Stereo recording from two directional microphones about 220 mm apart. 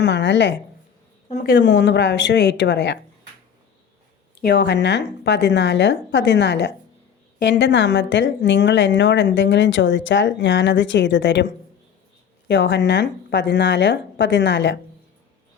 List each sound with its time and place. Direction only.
0.0 s a woman's voice: 50° left (ahead or behind)
1.5 s a woman's voice: 50° left (ahead or behind)
4.4 s a woman's voice: 50° left (ahead or behind)
12.5 s a woman's voice: 50° left (ahead or behind)